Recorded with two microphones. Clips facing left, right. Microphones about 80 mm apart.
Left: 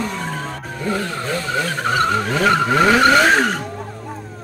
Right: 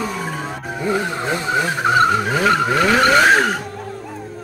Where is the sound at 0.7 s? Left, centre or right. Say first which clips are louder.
Right 3 dB; centre.